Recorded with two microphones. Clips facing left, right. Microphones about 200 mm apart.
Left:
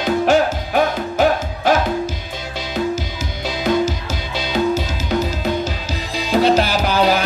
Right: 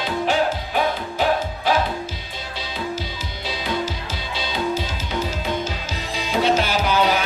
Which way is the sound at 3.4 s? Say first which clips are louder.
Left 8 dB; 45° left (ahead or behind).